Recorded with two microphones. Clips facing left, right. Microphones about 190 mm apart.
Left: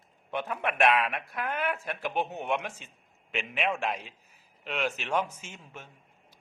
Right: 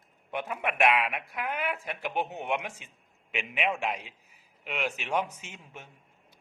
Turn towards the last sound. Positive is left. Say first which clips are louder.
# left 1 dB
turn(degrees=-15)  # may be behind; listen again after turning